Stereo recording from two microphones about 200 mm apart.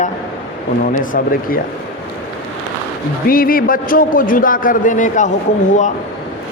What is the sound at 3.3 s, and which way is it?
A man's voice, 45° left (ahead or behind).